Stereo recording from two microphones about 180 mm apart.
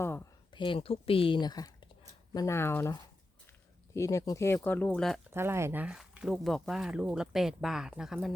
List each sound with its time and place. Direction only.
0.0 s a sound: 10° left (ahead or behind)
0.5 s speech: 30° left (ahead or behind); by 5.2 s centre (ahead or behind)
5.3 s speech: 15° right (ahead or behind)